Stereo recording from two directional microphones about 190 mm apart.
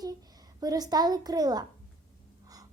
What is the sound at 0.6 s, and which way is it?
Speech, 20° right (ahead or behind).